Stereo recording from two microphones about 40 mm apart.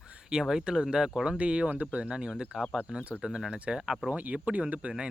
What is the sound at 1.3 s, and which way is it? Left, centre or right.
Speech, right.